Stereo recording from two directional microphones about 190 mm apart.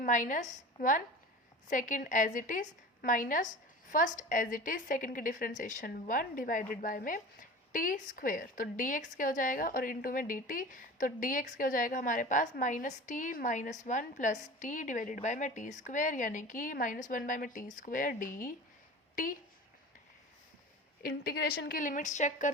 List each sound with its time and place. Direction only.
0.0 s a woman's voice: 45° left (ahead or behind)
21.0 s a woman's voice: 55° left (ahead or behind); by 22.4 s 40° left (ahead or behind)